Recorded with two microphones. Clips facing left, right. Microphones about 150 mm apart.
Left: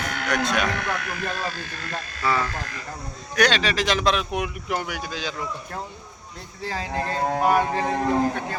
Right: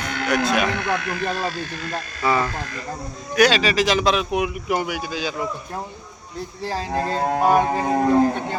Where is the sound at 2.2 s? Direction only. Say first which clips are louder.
Right 3 dB; 20° right (ahead or behind).